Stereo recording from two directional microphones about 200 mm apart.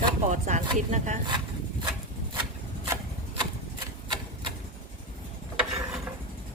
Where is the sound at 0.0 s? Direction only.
35° right (ahead or behind).